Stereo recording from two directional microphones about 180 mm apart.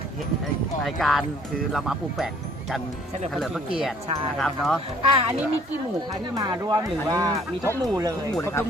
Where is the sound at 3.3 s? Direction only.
Centre (ahead or behind).